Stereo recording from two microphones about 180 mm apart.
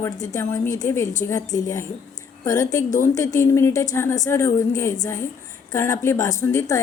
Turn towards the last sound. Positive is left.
turn(degrees=15)  # may be behind; listen again after turning